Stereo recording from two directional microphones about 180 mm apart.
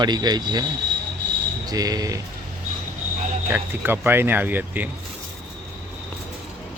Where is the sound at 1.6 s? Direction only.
20° right (ahead or behind).